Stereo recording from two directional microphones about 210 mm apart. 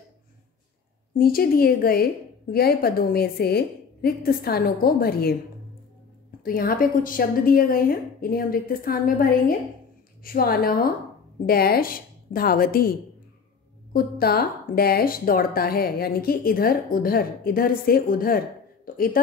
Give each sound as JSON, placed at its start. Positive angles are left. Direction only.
{"t": 1.1, "sound": "speech", "side_deg": 45}
{"t": 6.4, "sound": "speech", "side_deg": 45}
{"t": 13.9, "sound": "speech", "side_deg": 45}